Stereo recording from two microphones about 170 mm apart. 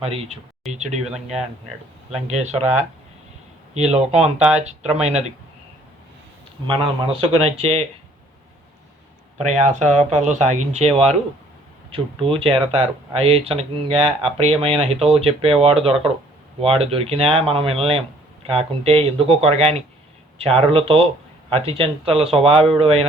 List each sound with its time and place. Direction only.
0.0 s speech: 35° right (ahead or behind)
2.2 s speech: 40° right (ahead or behind)
6.7 s speech: 30° right (ahead or behind)
9.5 s speech: 45° right (ahead or behind)